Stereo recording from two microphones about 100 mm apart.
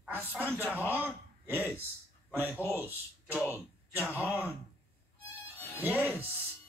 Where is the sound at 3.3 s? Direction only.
15° right (ahead or behind).